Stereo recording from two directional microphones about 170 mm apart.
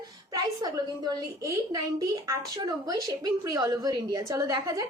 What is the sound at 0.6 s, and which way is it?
A woman's voice, 25° right (ahead or behind).